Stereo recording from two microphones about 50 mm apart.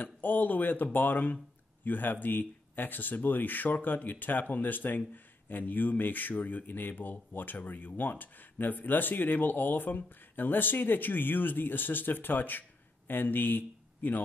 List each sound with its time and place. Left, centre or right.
0.0 s speech: left